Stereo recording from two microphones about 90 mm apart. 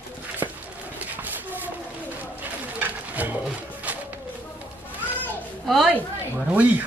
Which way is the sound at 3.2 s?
15° right (ahead or behind).